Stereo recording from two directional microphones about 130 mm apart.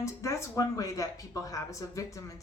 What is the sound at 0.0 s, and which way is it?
A woman's voice, 20° left (ahead or behind).